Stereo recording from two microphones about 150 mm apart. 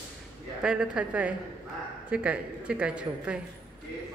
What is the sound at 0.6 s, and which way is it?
A woman's voice, 5° right (ahead or behind).